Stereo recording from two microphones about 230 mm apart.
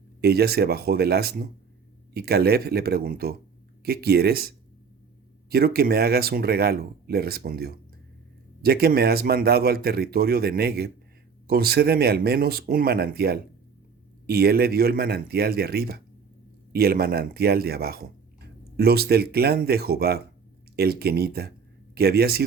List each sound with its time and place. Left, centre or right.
0.2 s speech: right